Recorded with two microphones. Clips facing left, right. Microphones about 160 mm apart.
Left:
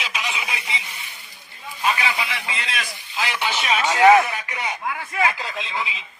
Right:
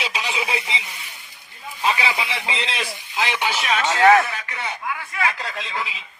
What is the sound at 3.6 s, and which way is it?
Speech, centre (ahead or behind).